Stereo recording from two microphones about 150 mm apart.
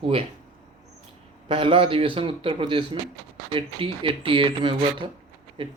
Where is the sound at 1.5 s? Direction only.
35° right (ahead or behind).